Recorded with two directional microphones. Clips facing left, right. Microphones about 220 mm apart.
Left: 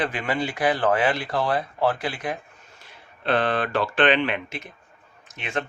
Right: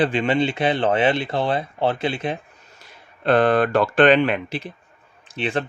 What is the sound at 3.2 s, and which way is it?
Speech, 45° right (ahead or behind).